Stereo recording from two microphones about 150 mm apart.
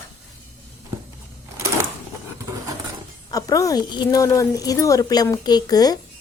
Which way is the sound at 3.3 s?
25° left (ahead or behind).